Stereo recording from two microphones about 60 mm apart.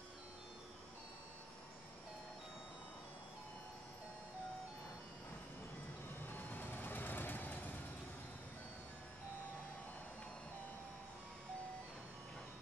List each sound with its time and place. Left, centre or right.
6.2 s vehicle: left